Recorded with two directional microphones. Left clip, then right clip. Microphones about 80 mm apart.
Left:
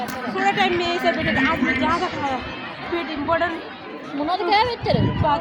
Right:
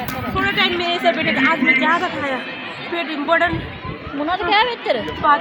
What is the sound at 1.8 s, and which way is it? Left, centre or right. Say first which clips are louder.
Speech: right 4 dB; centre.